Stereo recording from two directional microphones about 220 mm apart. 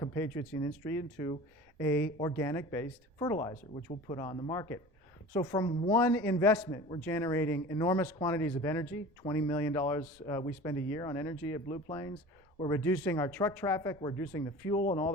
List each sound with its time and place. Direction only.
0.0 s speech: 15° left (ahead or behind)